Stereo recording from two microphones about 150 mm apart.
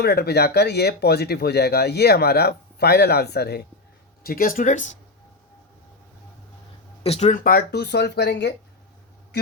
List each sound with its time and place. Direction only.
0.0 s speech: 90° left
4.3 s speech: 75° left (ahead or behind); by 4.9 s 55° left (ahead or behind)
7.0 s speech: 45° left (ahead or behind)
7.3 s speech: 80° left